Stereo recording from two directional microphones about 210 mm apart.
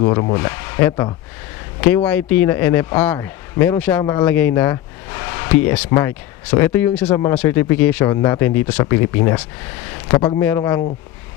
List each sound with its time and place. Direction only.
0.0 s speech: 15° left (ahead or behind)
2.0 s speech: 5° left (ahead or behind); by 10.4 s 25° left (ahead or behind)
10.4 s speech: 10° left (ahead or behind)